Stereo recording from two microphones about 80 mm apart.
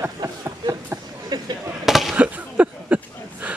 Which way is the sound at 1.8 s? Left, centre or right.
Centre.